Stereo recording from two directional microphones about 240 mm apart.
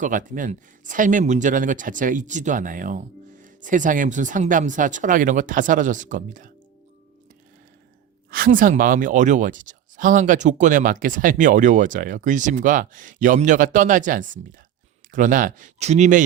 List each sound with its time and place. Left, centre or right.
0.0 s speech: right
8.3 s speech: right